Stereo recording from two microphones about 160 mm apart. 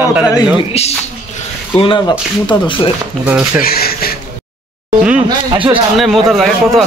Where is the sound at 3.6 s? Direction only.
70° left (ahead or behind).